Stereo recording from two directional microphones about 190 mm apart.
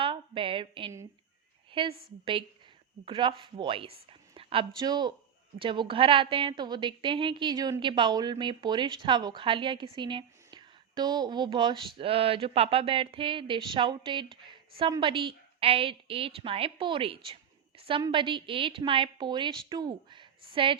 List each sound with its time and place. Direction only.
0.0 s a woman's voice: 25° right (ahead or behind)
3.1 s a woman's voice: 25° right (ahead or behind)